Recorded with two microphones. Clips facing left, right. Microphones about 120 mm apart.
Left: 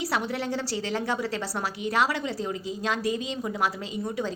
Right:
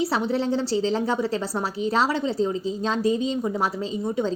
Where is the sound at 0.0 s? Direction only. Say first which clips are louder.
Right 5 dB; 25° right (ahead or behind).